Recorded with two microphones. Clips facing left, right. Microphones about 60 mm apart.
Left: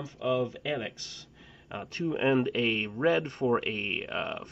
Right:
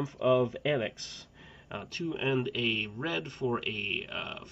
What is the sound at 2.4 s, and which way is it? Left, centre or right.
Speech, left.